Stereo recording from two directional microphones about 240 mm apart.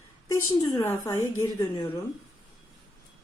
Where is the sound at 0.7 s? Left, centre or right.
Centre.